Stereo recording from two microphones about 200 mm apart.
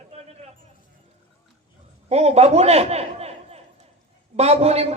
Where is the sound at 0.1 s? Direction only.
30° right (ahead or behind).